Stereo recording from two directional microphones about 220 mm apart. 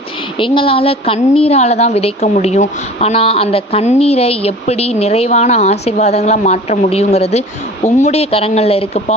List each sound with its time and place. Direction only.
0.3 s a woman's voice: 25° left (ahead or behind)